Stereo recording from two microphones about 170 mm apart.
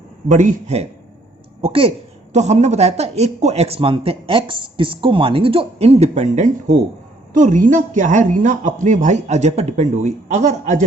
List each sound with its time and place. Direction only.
0.3 s a woman's voice: 50° right (ahead or behind)
1.6 s a woman's voice: 35° right (ahead or behind)